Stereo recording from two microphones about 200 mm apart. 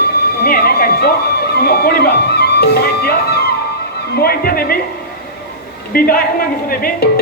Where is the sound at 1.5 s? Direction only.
55° left (ahead or behind).